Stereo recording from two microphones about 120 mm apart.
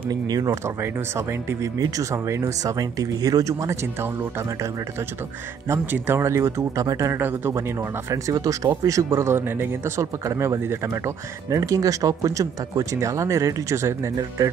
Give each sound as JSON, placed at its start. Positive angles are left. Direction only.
{"t": 0.1, "sound": "speech", "side_deg": -30}
{"t": 5.7, "sound": "speech", "side_deg": -20}
{"t": 8.1, "sound": "speech", "side_deg": -30}